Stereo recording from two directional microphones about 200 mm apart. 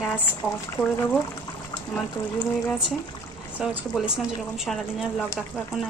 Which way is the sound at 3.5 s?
5° right (ahead or behind).